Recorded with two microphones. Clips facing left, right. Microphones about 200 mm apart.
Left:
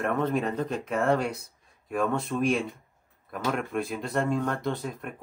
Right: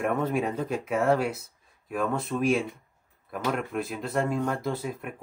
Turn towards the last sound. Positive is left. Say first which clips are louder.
# even
turn(degrees=-5)  # may be behind; listen again after turning